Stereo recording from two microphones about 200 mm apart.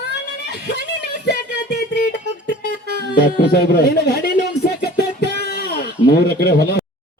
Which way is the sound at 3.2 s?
50° left (ahead or behind).